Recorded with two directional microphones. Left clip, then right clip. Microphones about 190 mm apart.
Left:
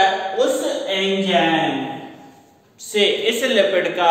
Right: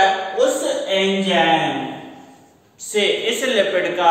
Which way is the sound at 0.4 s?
10° left (ahead or behind).